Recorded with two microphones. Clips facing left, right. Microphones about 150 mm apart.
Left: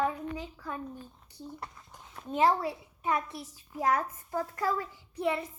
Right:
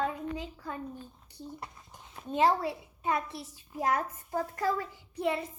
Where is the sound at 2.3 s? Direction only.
25° right (ahead or behind).